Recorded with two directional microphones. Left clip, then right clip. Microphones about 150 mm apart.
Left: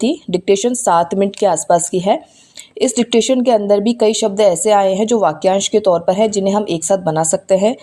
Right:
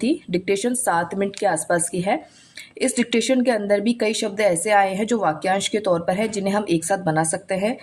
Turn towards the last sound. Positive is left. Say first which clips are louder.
# left 10 dB
turn(degrees=40)  # may be behind; listen again after turning